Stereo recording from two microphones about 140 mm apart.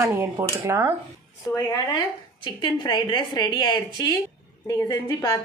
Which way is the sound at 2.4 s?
30° left (ahead or behind).